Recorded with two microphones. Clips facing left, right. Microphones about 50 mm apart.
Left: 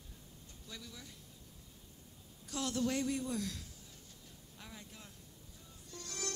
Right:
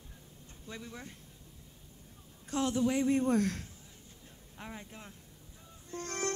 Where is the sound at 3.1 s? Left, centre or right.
Right.